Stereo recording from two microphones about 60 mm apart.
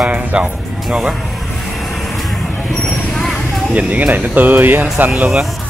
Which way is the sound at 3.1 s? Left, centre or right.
Centre.